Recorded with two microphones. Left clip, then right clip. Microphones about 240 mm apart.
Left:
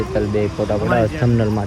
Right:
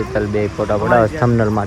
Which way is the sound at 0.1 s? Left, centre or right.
Right.